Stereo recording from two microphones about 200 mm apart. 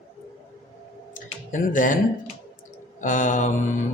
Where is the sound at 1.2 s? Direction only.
40° left (ahead or behind).